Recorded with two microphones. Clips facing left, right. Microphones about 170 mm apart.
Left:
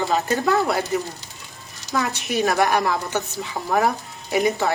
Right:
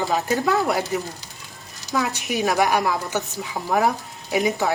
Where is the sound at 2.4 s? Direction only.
5° right (ahead or behind).